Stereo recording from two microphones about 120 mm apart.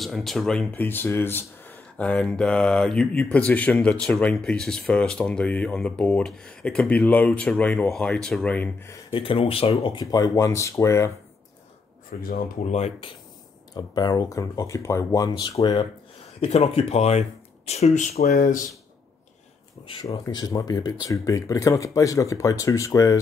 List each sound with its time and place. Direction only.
0.0 s speech: centre (ahead or behind)
9.1 s speech: 50° left (ahead or behind)
10.1 s speech: 30° left (ahead or behind)
12.6 s speech: 65° left (ahead or behind)
13.7 s speech: 35° left (ahead or behind)
16.3 s speech: 60° left (ahead or behind); by 18.6 s 90° left
20.1 s speech: 35° left (ahead or behind)